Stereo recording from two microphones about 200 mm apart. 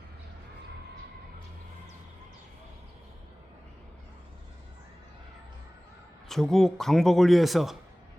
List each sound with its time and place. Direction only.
6.2 s a man's voice: centre (ahead or behind)